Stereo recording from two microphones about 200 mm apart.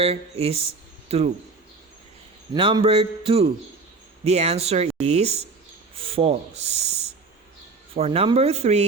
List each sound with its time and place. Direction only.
0.0 s speech: 30° right (ahead or behind)
2.6 s a sound: 25° right (ahead or behind)
4.2 s speech: 30° right (ahead or behind)
7.9 s speech: 30° right (ahead or behind)